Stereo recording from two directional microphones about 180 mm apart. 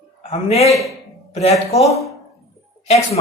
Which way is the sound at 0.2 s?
35° left (ahead or behind).